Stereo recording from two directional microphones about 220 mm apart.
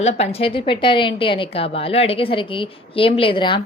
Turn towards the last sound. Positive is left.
turn(degrees=20)  # may be behind; listen again after turning